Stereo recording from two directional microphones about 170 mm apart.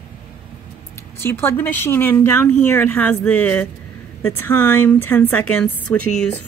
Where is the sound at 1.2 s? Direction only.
15° left (ahead or behind).